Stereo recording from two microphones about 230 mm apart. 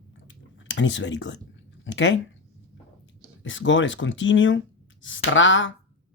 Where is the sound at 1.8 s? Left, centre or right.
Left.